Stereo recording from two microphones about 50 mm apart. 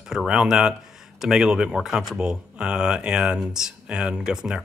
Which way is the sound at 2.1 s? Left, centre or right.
Centre.